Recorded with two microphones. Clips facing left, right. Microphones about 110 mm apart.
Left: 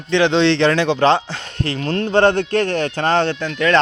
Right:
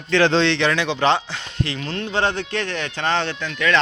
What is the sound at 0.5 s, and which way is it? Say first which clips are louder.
Speech: left 5 dB; 40° left (ahead or behind).